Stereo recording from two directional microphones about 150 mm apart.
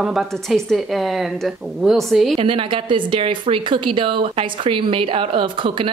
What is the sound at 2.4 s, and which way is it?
Speech, 35° right (ahead or behind).